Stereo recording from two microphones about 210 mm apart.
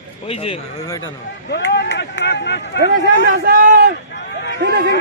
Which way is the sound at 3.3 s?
55° right (ahead or behind).